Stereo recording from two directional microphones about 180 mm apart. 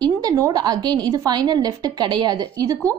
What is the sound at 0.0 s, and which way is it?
A woman's voice, 20° right (ahead or behind).